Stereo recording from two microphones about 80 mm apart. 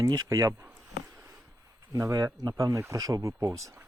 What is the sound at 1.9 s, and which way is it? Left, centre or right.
Speech, right.